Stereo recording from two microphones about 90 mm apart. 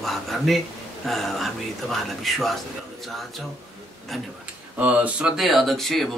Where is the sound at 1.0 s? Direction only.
5° left (ahead or behind).